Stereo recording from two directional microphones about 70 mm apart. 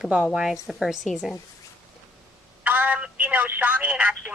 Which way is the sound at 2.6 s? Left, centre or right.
Right.